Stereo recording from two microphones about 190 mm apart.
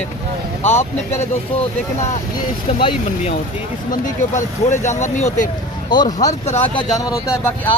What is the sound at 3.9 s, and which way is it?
Speech, 40° left (ahead or behind).